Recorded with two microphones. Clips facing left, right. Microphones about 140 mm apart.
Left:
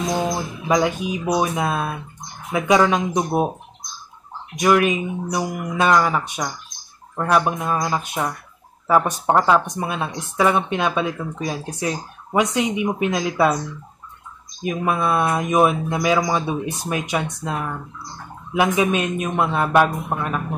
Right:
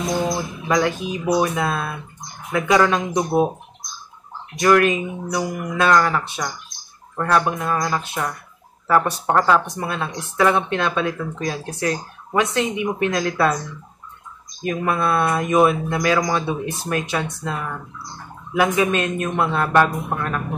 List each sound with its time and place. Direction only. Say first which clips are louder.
0.7 s a woman's voice: left 1 dB; 15° left (ahead or behind)
4.6 s a woman's voice: right 1 dB; 15° left (ahead or behind)
14.6 s a woman's voice: even; 15° left (ahead or behind)